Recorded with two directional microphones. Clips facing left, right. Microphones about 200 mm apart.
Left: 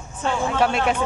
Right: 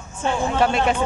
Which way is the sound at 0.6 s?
Centre (ahead or behind).